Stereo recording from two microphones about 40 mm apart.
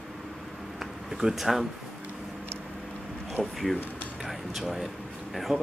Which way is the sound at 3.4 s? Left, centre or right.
Centre.